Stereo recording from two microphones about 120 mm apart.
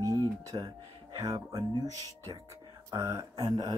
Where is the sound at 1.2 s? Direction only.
30° right (ahead or behind).